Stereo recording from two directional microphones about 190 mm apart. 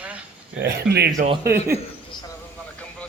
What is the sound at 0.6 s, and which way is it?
Speech, 60° right (ahead or behind).